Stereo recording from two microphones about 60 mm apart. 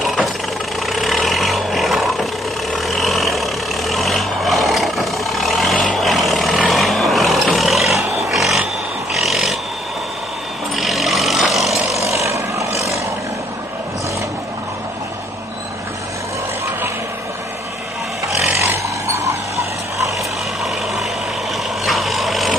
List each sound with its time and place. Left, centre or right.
0.0 s vehicle: centre
9.1 s pig: centre
10.8 s vehicle: centre
12.1 s vehicle: right
19.0 s dog: right
21.8 s vehicle: centre